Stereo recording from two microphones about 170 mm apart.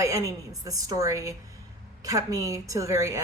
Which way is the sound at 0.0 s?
20° right (ahead or behind).